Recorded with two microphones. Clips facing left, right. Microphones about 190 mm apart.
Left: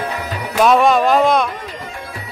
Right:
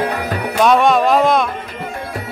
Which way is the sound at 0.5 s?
Centre (ahead or behind).